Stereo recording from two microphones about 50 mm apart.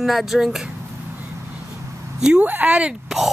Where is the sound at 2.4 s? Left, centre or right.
Right.